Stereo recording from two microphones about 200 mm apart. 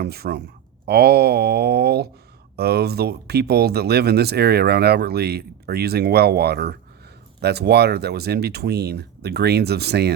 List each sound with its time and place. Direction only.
0.0 s speech: 50° right (ahead or behind)